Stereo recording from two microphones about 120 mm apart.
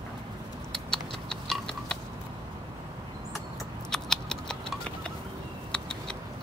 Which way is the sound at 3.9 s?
5° left (ahead or behind).